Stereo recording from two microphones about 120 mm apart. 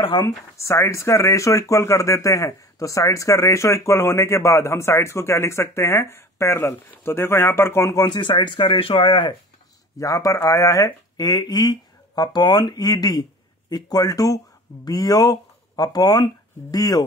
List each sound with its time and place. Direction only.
0.6 s speech: 25° left (ahead or behind); by 9.3 s 40° left (ahead or behind)
9.9 s speech: 30° left (ahead or behind)